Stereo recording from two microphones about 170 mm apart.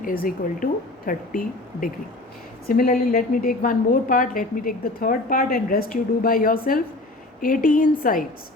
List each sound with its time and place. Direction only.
0.0 s a woman's voice: 55° left (ahead or behind)